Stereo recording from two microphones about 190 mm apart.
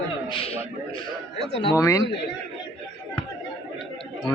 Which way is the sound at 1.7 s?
15° left (ahead or behind).